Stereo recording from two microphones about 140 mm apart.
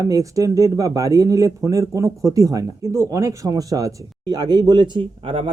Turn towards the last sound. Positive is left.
turn(degrees=-40)  # may be behind; listen again after turning